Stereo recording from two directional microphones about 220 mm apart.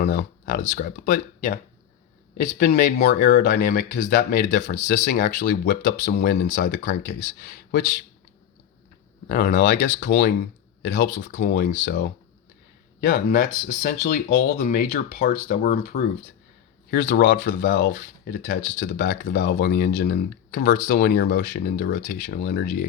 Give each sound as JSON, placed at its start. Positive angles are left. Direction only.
{"t": 0.0, "sound": "a sound", "side_deg": 50}
{"t": 0.6, "sound": "speech", "side_deg": 35}
{"t": 2.6, "sound": "speech", "side_deg": 40}
{"t": 9.3, "sound": "speech", "side_deg": 40}
{"t": 19.3, "sound": "speech", "side_deg": 50}
{"t": 22.0, "sound": "speech", "side_deg": 35}